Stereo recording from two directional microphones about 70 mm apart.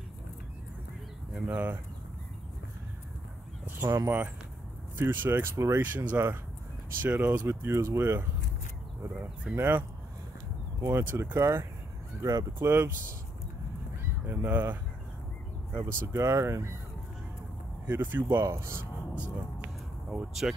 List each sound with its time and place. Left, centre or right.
1.5 s speech: right
3.6 s speech: right
7.4 s speech: right
9.6 s speech: right
12.2 s speech: right
12.5 s speech: right
14.2 s speech: right
15.7 s speech: right
17.8 s speech: right
18.4 s speech: right
20.1 s speech: centre